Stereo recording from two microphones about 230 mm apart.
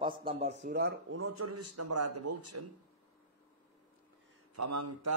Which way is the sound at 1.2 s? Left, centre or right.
Right.